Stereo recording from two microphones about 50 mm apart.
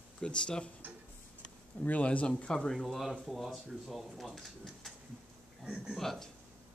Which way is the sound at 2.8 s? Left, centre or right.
Centre.